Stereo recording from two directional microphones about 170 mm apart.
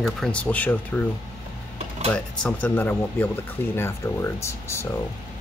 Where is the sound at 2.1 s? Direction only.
10° left (ahead or behind).